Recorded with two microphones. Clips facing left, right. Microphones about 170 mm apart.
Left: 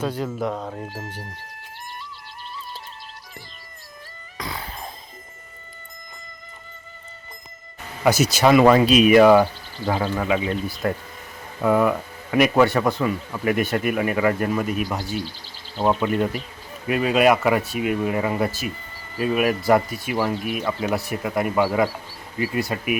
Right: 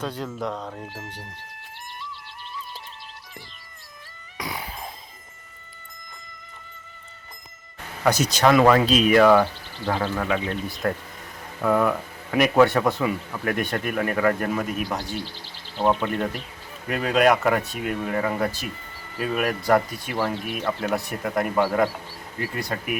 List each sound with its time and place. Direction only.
0.0 s speech: 5° left (ahead or behind)
0.8 s speech: 40° left (ahead or behind)
4.4 s a sound: 15° right (ahead or behind)
8.0 s speech: 5° left (ahead or behind)